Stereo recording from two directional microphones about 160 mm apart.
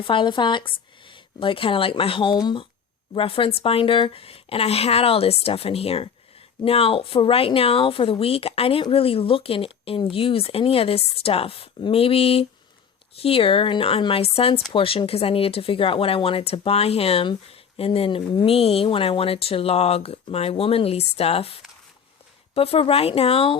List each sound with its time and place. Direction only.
0.0 s a woman's voice: 30° left (ahead or behind)